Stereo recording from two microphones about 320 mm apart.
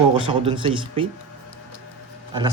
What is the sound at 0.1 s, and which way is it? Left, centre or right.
Speech, centre.